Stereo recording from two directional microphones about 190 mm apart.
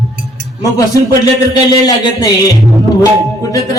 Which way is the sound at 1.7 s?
20° left (ahead or behind).